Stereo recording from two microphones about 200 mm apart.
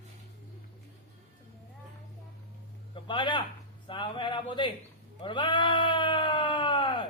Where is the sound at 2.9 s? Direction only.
25° left (ahead or behind).